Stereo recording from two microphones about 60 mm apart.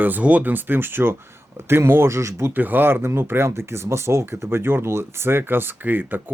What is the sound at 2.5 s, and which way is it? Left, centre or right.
Speech, right.